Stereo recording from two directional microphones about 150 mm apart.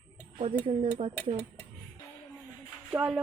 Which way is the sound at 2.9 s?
5° right (ahead or behind).